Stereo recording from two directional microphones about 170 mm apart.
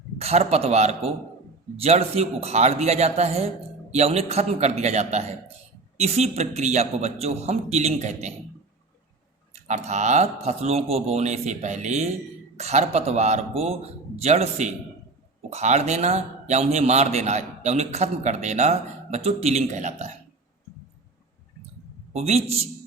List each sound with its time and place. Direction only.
0.2 s a man's voice: 40° right (ahead or behind)
9.6 s a man's voice: 45° right (ahead or behind)
22.1 s a man's voice: 40° right (ahead or behind)